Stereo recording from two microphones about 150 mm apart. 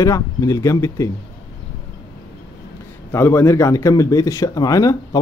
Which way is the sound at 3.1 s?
15° left (ahead or behind).